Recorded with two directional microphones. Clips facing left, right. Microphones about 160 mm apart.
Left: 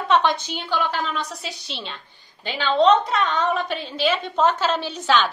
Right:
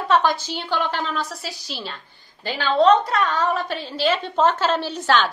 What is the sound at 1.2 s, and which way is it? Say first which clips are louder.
Speech: right 1 dB; centre (ahead or behind).